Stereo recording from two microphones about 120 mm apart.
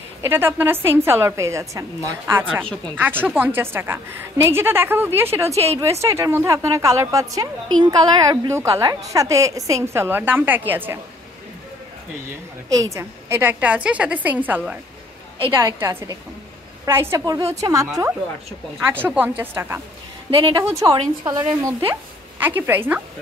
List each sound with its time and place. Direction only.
0.2 s a woman's voice: 20° right (ahead or behind)
2.5 s a woman's voice: 5° left (ahead or behind)
3.0 s a woman's voice: 15° right (ahead or behind)
12.6 s a woman's voice: 25° right (ahead or behind)
19.0 s a woman's voice: 15° right (ahead or behind)
20.2 s speech: 50° right (ahead or behind)
20.8 s a woman's voice: 40° right (ahead or behind)
22.4 s a woman's voice: 15° right (ahead or behind)